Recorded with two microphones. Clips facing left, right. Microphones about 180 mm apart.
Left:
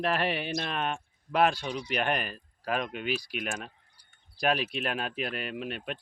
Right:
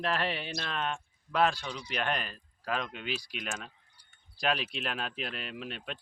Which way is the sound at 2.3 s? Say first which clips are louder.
Left 3 dB; 50° left (ahead or behind).